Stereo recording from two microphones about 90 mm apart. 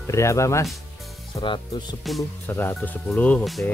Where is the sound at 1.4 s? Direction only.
60° left (ahead or behind).